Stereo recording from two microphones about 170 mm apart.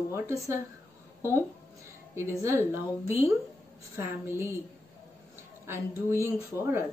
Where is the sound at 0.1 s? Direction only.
15° right (ahead or behind).